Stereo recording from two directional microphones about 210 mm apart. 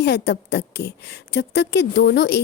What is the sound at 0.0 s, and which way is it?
A woman's voice, 55° left (ahead or behind).